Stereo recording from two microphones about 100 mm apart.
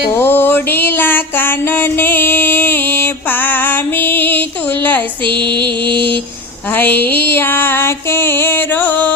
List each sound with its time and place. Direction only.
0.2 s music: 25° left (ahead or behind)
6.7 s music: 20° left (ahead or behind)